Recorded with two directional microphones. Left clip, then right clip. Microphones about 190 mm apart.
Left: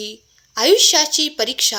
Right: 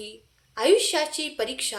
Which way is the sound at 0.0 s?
40° left (ahead or behind).